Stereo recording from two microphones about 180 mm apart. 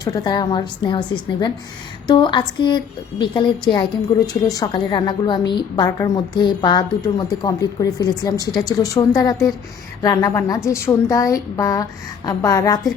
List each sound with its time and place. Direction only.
0.0 s a woman's voice: 20° left (ahead or behind)